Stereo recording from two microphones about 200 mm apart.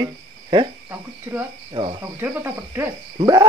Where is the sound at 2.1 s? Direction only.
10° right (ahead or behind).